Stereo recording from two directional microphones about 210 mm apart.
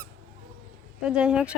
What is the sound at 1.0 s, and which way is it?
Speech, 5° right (ahead or behind).